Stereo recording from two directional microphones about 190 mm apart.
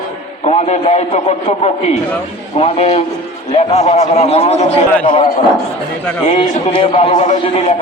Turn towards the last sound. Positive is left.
turn(degrees=30)  # may be behind; listen again after turning